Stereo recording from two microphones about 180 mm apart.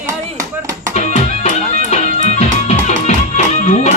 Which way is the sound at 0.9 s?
40° left (ahead or behind).